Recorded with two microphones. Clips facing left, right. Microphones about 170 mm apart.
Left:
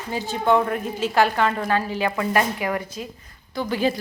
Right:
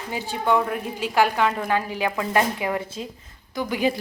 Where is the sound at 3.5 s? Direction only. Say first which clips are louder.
Left 1 dB; 15° right (ahead or behind).